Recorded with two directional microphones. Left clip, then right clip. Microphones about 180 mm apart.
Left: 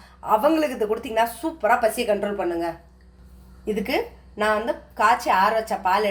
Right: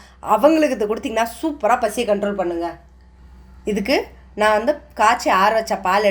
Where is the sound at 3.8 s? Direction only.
55° right (ahead or behind).